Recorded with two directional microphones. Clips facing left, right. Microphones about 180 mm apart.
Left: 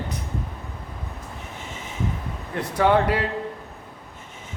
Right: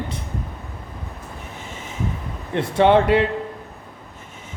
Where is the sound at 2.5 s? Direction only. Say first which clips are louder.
Right 4 dB; 25° right (ahead or behind).